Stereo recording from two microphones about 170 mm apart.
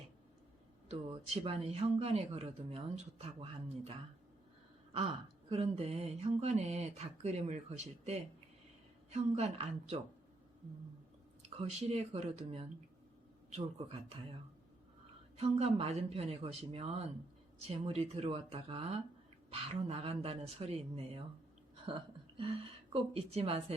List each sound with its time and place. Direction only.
0.9 s speech: 35° right (ahead or behind)
5.5 s speech: 35° right (ahead or behind)
11.4 s speech: 40° right (ahead or behind)
13.7 s speech: 35° right (ahead or behind)
15.4 s speech: 35° right (ahead or behind)